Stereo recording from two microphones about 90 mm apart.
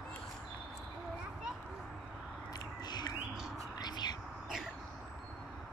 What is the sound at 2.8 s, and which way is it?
Bird, 50° left (ahead or behind).